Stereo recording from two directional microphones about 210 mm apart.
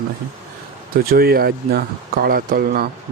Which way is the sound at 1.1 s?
45° right (ahead or behind).